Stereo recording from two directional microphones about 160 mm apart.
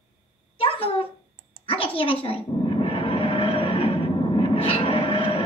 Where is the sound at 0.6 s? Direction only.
35° left (ahead or behind).